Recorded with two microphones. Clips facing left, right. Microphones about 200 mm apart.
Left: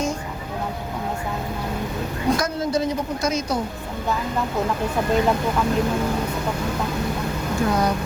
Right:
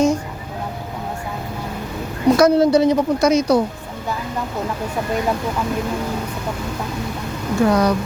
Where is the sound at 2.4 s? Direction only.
70° right (ahead or behind).